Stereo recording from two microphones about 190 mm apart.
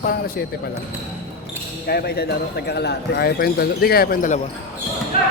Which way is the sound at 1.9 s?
55° left (ahead or behind).